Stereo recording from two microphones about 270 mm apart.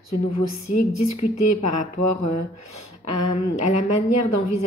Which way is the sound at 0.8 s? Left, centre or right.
Left.